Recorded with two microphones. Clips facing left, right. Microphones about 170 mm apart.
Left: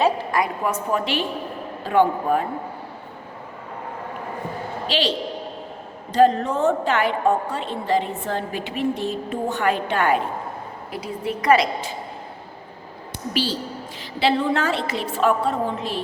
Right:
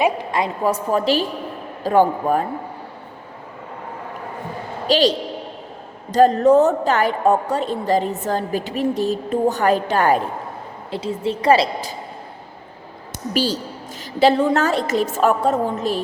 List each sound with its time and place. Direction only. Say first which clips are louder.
0.0 s a woman's voice: right 1 dB; 25° right (ahead or behind); by 2.4 s 40° right (ahead or behind)
4.9 s a woman's voice: right 7 dB; 40° right (ahead or behind)
10.9 s a woman's voice: right 5 dB; 25° right (ahead or behind)
13.3 s a woman's voice: right 4 dB; 45° right (ahead or behind)